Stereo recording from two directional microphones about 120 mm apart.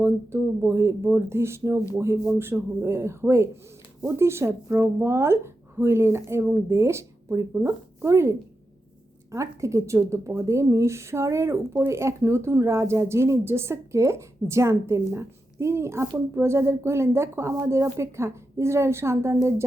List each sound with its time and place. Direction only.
0.0 s speech: 20° right (ahead or behind)